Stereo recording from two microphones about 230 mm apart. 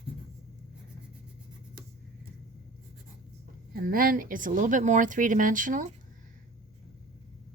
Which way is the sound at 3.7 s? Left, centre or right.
Right.